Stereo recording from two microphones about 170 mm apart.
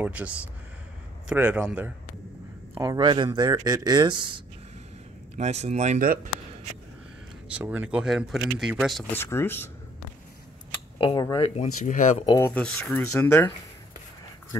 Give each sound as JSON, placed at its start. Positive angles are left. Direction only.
{"t": 0.0, "sound": "speech", "side_deg": -10}
{"t": 2.8, "sound": "speech", "side_deg": -20}
{"t": 5.4, "sound": "speech", "side_deg": -40}
{"t": 7.5, "sound": "speech", "side_deg": -10}
{"t": 9.1, "sound": "speech", "side_deg": 15}
{"t": 11.0, "sound": "speech", "side_deg": 30}
{"t": 12.4, "sound": "speech", "side_deg": 10}